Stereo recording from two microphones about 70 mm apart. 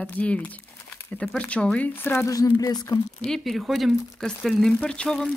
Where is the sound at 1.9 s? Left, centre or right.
Left.